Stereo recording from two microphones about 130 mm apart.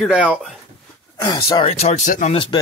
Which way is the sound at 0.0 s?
5° right (ahead or behind).